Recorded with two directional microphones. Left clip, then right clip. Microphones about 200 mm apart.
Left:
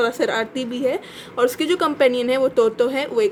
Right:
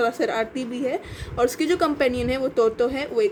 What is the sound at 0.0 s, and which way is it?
A woman's voice, 15° left (ahead or behind).